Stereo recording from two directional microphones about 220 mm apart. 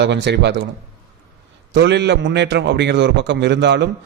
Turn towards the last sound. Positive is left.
turn(degrees=-50)  # may be behind; listen again after turning